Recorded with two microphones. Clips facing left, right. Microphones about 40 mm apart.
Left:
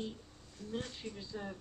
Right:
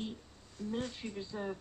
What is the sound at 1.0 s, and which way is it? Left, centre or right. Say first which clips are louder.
Speech: right 3 dB; right.